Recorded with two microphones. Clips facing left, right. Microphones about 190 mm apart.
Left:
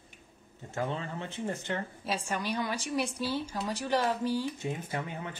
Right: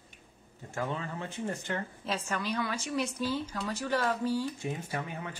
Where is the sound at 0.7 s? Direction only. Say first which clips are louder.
Left 1 dB; 30° left (ahead or behind).